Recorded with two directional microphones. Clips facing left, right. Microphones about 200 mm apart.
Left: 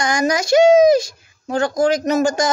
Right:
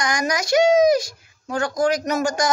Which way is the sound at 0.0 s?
25° left (ahead or behind).